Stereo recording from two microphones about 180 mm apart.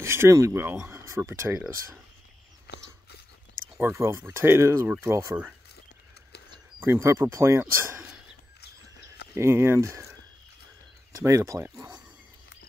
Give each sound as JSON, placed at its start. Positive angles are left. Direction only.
{"t": 0.0, "sound": "speech", "side_deg": -15}
{"t": 2.6, "sound": "a sound", "side_deg": 65}
{"t": 3.7, "sound": "speech", "side_deg": -15}
{"t": 6.8, "sound": "speech", "side_deg": -15}
{"t": 7.8, "sound": "a sound", "side_deg": -10}
{"t": 9.3, "sound": "speech", "side_deg": -15}
{"t": 11.1, "sound": "speech", "side_deg": -15}